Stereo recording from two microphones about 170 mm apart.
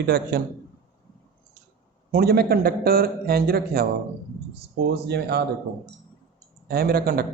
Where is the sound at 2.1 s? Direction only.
65° right (ahead or behind).